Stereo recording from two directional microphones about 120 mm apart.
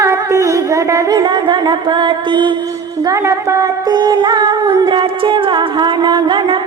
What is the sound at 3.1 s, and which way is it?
Music, 25° right (ahead or behind).